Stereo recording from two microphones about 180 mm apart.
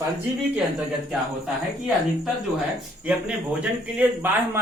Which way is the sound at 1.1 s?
Centre (ahead or behind).